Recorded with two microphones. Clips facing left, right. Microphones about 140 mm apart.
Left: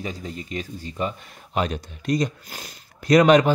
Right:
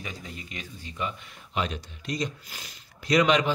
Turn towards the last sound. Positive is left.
turn(degrees=45)  # may be behind; listen again after turning